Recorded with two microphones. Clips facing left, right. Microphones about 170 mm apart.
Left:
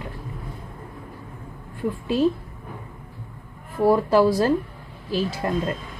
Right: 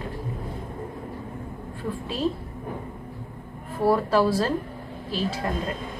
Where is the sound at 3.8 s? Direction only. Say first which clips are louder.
Left 3 dB; 15° left (ahead or behind).